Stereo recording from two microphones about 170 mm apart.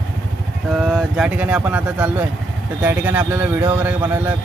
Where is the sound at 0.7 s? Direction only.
Centre (ahead or behind).